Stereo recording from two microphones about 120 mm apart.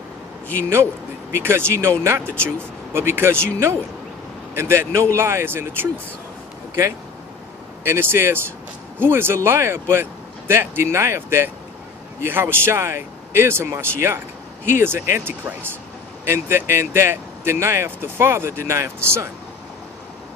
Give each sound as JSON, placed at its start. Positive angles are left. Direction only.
{"t": 1.4, "sound": "speech", "side_deg": -20}
{"t": 7.9, "sound": "speech", "side_deg": -20}